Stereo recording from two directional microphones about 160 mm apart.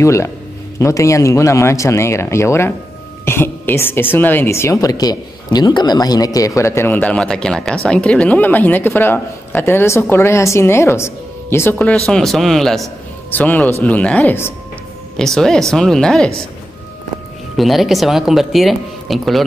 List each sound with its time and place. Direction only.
0.0 s a woman's voice: 20° left (ahead or behind)
12.1 s a woman's voice: centre (ahead or behind)
17.6 s speech: centre (ahead or behind)